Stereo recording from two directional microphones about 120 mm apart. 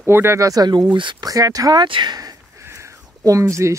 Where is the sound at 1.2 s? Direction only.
30° right (ahead or behind).